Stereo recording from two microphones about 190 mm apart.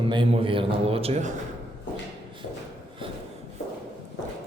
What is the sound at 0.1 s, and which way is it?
A man's voice, 25° right (ahead or behind).